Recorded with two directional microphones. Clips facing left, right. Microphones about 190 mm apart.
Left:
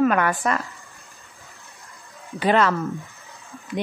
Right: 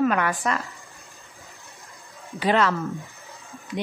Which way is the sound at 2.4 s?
50° left (ahead or behind).